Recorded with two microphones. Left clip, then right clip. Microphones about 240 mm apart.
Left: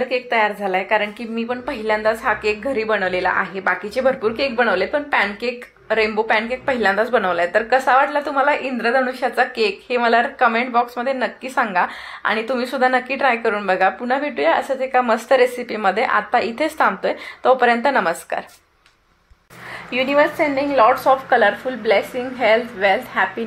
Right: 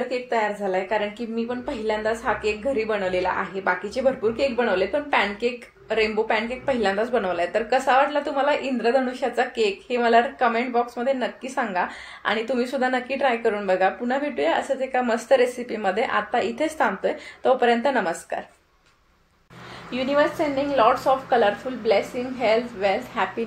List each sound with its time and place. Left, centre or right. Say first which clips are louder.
0.1 s a woman's voice: left 6 dB; left
19.9 s a woman's voice: left 5 dB; left